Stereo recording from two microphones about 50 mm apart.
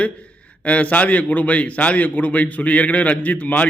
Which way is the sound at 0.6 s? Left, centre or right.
Left.